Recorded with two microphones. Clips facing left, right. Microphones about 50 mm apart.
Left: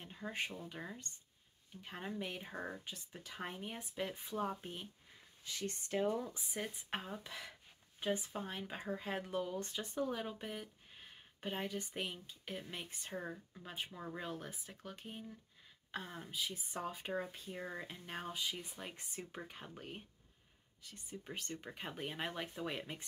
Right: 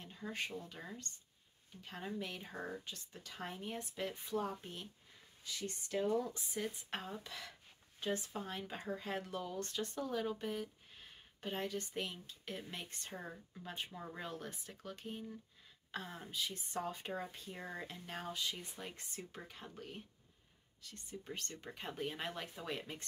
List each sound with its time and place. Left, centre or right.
0.0 s a sound: centre
0.7 s speech: centre
5.4 s speech: left
5.9 s speech: left